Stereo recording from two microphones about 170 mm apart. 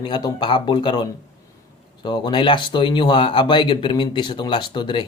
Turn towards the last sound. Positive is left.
turn(degrees=30)  # may be behind; listen again after turning